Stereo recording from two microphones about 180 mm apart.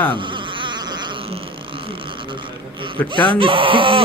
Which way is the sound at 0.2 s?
25° right (ahead or behind).